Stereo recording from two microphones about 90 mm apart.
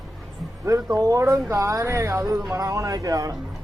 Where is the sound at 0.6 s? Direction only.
35° right (ahead or behind).